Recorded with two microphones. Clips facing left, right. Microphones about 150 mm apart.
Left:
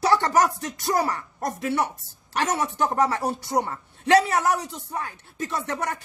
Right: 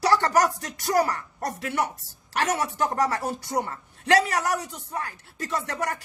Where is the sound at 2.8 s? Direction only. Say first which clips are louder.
Left 2 dB; 20° left (ahead or behind).